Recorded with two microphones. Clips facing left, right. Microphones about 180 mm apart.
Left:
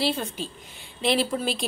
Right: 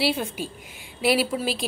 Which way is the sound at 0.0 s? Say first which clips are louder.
Right 2 dB; 10° right (ahead or behind).